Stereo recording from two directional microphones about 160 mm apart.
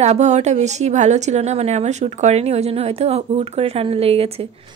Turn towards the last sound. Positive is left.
turn(degrees=-40)  # may be behind; listen again after turning